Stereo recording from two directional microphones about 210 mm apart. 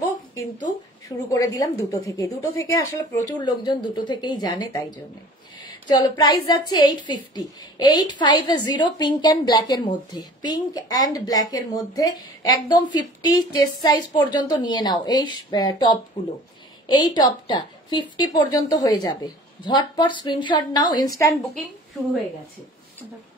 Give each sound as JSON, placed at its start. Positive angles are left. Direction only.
{"t": 1.0, "sound": "a woman's voice", "side_deg": 15}